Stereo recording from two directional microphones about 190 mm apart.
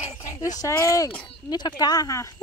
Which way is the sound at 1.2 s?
20° left (ahead or behind).